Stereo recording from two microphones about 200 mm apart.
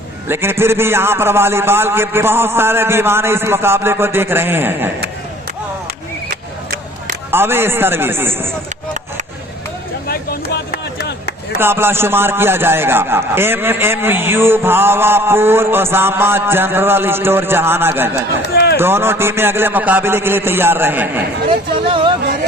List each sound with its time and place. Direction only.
0.3 s a man's voice: 10° right (ahead or behind)
6.3 s a sound: 50° right (ahead or behind)
7.3 s a man's voice: 10° right (ahead or behind)
10.1 s speech: 50° left (ahead or behind)
11.6 s a man's voice: 10° right (ahead or behind)
18.5 s run: 55° left (ahead or behind)
18.8 s a man's voice: 10° right (ahead or behind)
21.8 s speech: 25° right (ahead or behind)